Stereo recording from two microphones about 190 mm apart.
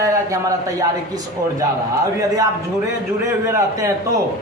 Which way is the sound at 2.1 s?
15° right (ahead or behind).